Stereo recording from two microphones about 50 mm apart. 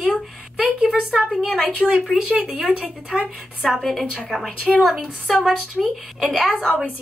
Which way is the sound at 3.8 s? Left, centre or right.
Centre.